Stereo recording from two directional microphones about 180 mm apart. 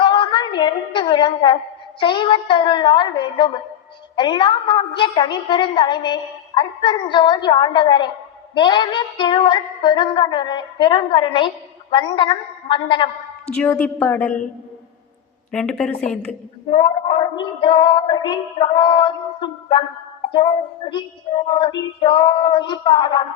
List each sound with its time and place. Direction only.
0.0 s a woman's voice: 25° left (ahead or behind)
13.5 s a woman's voice: 10° left (ahead or behind)
15.5 s a woman's voice: 5° left (ahead or behind)
16.7 s a woman's voice: 30° left (ahead or behind)